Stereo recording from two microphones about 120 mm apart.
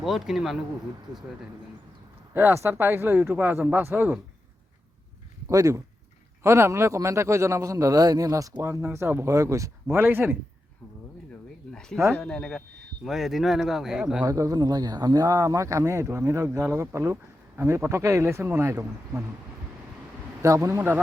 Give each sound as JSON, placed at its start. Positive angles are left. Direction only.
{"t": 0.0, "sound": "speech", "side_deg": -5}
{"t": 2.3, "sound": "speech", "side_deg": -15}
{"t": 5.5, "sound": "speech", "side_deg": -25}
{"t": 11.7, "sound": "speech", "side_deg": 5}
{"t": 14.3, "sound": "speech", "side_deg": -30}
{"t": 20.4, "sound": "speech", "side_deg": -25}